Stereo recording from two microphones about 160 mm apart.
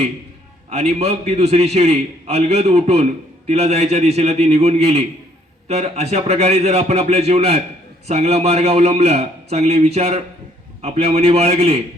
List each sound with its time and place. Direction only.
0.7 s a man's voice: 40° right (ahead or behind)